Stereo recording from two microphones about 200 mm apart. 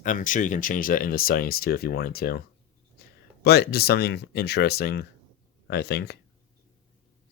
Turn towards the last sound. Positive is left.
turn(degrees=55)  # may be behind; listen again after turning